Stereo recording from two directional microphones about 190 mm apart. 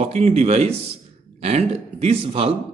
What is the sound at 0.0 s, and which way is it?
A man's voice, 35° right (ahead or behind).